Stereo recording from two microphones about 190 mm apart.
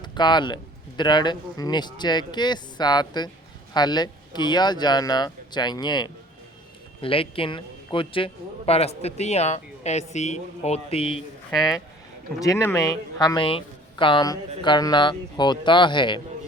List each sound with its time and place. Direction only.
0.0 s speech: 25° left (ahead or behind)
11.5 s speech: centre (ahead or behind)
12.4 s speech: 15° left (ahead or behind)